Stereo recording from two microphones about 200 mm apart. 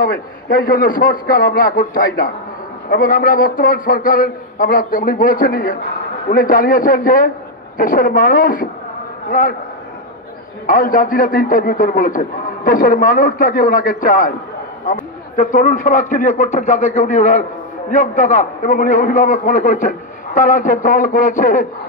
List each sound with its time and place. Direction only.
0.0 s a man's voice: 45° left (ahead or behind)
10.7 s a man's voice: 45° left (ahead or behind)